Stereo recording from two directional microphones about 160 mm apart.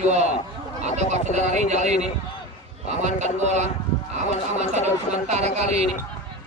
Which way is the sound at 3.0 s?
45° right (ahead or behind).